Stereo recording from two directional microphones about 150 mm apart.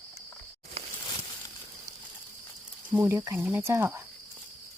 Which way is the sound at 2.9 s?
15° right (ahead or behind).